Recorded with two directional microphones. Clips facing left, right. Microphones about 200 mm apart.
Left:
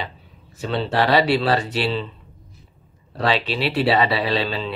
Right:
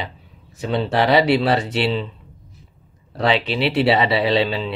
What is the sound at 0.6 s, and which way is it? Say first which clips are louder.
Speech: right 2 dB; 20° right (ahead or behind).